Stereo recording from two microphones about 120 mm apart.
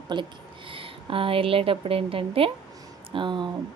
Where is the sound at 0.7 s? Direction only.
45° right (ahead or behind).